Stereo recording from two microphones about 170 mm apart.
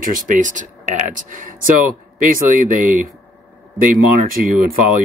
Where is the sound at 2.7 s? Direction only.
50° right (ahead or behind).